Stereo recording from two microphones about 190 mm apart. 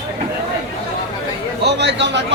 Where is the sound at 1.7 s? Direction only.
65° right (ahead or behind).